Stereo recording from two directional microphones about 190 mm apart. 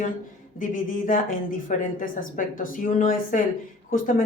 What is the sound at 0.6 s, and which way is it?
A woman's voice, 45° left (ahead or behind).